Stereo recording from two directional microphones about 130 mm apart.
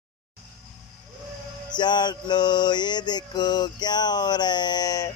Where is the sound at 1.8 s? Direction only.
35° left (ahead or behind).